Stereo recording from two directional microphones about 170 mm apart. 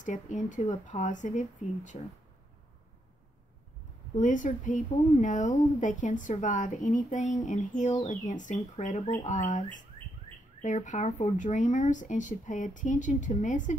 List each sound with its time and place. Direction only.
0.0 s speech: 50° left (ahead or behind)
4.1 s speech: 50° left (ahead or behind)